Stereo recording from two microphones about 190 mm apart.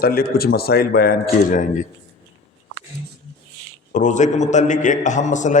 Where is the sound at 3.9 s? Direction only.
40° left (ahead or behind).